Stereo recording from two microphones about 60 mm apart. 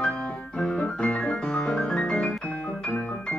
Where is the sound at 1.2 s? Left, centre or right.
Centre.